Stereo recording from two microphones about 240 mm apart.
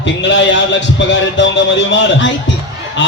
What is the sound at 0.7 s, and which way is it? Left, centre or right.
Speech, left.